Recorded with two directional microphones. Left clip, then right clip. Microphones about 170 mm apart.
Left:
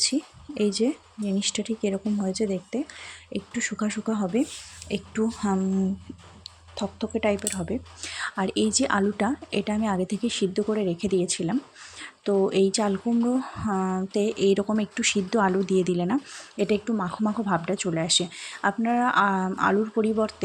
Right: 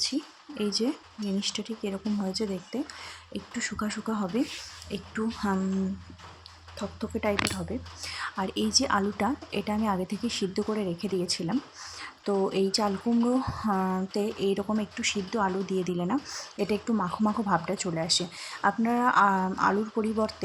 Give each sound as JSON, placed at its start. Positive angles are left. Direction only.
{"t": 0.0, "sound": "speech", "side_deg": 30}
{"t": 6.7, "sound": "speech", "side_deg": 25}